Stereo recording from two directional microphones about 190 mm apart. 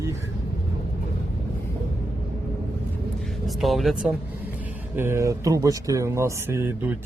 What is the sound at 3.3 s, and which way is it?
A man's voice, centre (ahead or behind).